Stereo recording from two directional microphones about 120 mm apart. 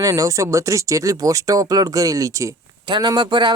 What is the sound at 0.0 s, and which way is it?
Speech, 30° right (ahead or behind).